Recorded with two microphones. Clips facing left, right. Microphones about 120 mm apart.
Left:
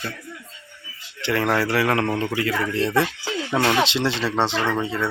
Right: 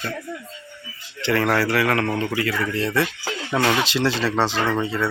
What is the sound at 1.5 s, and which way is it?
Speech, 20° left (ahead or behind).